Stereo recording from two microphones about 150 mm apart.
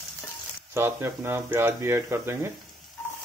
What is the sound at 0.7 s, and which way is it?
Speech, 15° right (ahead or behind).